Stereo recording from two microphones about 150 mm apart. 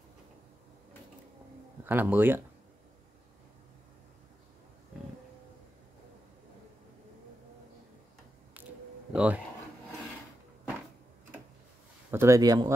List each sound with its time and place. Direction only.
1.9 s speech: 15° right (ahead or behind)
8.6 s a sound: 10° right (ahead or behind)
12.1 s speech: 20° right (ahead or behind)